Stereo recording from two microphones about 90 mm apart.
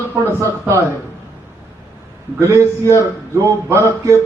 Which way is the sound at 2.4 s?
30° right (ahead or behind).